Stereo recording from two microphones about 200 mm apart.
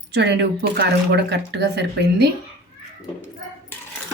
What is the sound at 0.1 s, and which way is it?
Speech, 55° right (ahead or behind).